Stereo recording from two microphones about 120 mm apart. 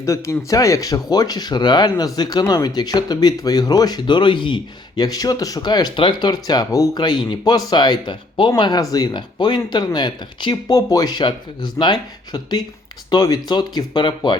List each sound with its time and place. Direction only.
0.0 s speech: 25° left (ahead or behind)